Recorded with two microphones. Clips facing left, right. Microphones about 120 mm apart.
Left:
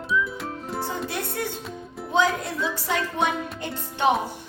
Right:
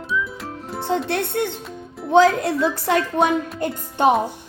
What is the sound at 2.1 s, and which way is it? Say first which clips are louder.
Speech: right 8 dB; 70° right (ahead or behind).